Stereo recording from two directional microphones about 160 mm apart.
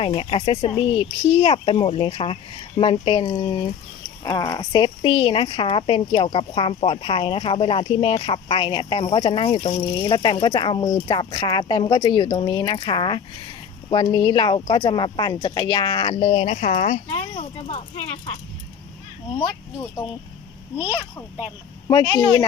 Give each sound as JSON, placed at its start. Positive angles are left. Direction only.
{"t": 0.0, "sound": "speech", "side_deg": 30}
{"t": 19.4, "sound": "speech", "side_deg": 20}
{"t": 20.7, "sound": "speech", "side_deg": -10}
{"t": 21.8, "sound": "speech", "side_deg": 25}